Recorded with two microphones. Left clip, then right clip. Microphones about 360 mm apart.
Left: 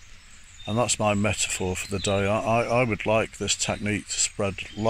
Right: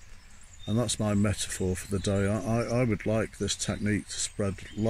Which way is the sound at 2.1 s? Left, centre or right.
Left.